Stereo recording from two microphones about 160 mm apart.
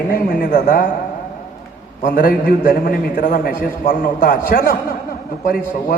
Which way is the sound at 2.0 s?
60° left (ahead or behind).